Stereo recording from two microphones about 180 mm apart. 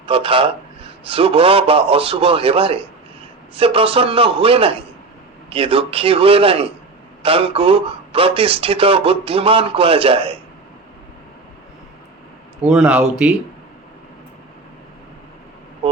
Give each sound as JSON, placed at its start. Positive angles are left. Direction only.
{"t": 0.0, "sound": "speech", "side_deg": -30}
{"t": 12.6, "sound": "speech", "side_deg": -5}